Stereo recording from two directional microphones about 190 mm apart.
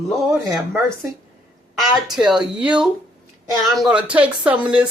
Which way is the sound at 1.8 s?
Centre (ahead or behind).